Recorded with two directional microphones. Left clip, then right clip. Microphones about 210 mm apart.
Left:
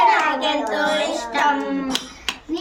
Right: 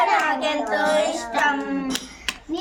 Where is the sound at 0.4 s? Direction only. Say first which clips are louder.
Left 1 dB; 15° right (ahead or behind).